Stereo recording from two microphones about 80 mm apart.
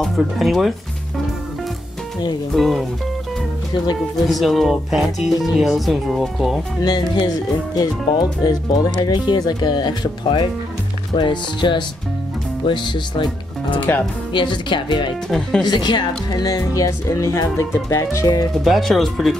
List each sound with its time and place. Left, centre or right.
0.0 s speech: centre
2.5 s speech: centre
4.3 s speech: centre
6.8 s speech: left
13.7 s speech: left
14.3 s speech: left
15.2 s speech: centre
15.6 s speech: left
16.3 s speech: left
18.6 s speech: centre